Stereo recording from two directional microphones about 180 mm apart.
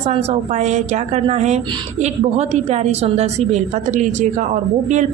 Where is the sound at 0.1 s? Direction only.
35° right (ahead or behind).